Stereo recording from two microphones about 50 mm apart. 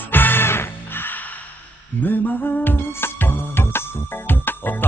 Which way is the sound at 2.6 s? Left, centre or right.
Left.